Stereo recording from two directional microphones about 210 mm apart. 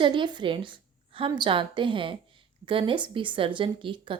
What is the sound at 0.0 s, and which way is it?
A woman's voice, 25° right (ahead or behind).